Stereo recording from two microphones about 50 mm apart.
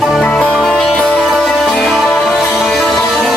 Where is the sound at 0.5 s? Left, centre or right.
Centre.